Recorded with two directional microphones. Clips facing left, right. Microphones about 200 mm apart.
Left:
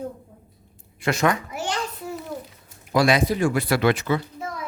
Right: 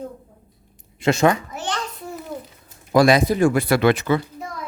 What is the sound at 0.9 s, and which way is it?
Speech, 25° right (ahead or behind).